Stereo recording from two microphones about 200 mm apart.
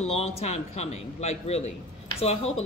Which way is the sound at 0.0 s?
30° left (ahead or behind).